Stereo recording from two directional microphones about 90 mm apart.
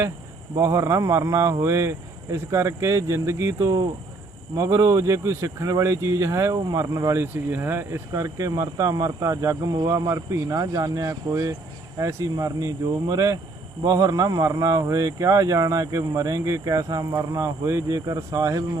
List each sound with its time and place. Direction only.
0.5 s a man's voice: 35° right (ahead or behind)